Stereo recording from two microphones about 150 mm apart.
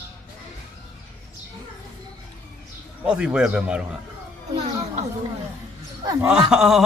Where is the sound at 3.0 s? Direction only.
5° right (ahead or behind).